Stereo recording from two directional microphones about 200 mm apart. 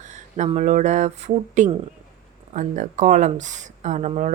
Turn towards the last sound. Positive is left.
turn(degrees=-35)  # may be behind; listen again after turning